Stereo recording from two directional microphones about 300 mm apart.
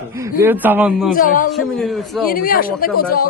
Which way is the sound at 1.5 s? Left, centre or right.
Centre.